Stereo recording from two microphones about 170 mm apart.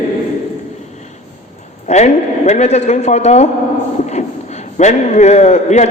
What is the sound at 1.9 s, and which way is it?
A man's voice, 45° left (ahead or behind).